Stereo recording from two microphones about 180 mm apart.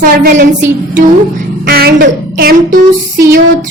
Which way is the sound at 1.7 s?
55° right (ahead or behind).